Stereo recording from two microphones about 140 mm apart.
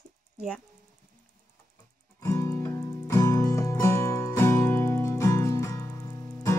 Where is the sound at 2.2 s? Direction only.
20° left (ahead or behind).